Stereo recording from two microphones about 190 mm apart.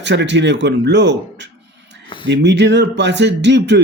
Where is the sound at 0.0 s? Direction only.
70° right (ahead or behind).